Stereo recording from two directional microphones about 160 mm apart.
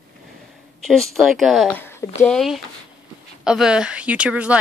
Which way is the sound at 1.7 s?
15° left (ahead or behind).